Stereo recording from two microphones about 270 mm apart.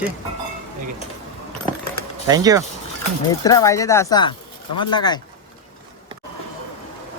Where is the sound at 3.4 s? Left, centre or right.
Centre.